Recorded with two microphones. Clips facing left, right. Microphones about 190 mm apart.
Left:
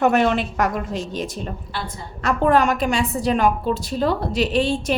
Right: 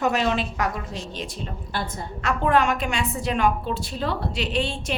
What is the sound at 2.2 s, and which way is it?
A woman's voice, 40° left (ahead or behind).